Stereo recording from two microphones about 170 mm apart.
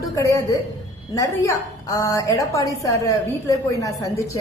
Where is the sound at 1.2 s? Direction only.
20° left (ahead or behind).